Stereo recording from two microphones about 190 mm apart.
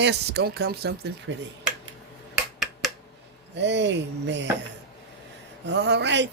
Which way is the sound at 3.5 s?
65° right (ahead or behind).